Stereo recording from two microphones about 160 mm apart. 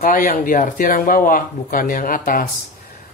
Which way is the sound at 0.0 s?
60° left (ahead or behind).